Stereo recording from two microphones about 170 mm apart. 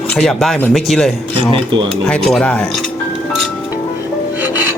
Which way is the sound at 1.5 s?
30° right (ahead or behind).